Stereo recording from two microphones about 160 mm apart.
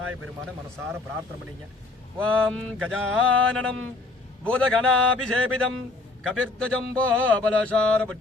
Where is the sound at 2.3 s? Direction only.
5° left (ahead or behind).